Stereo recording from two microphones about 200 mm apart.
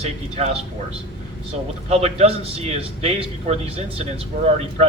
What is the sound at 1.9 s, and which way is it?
A man's voice, 30° right (ahead or behind).